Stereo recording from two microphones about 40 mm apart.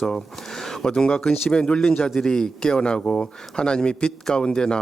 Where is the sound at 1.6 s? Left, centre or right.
Left.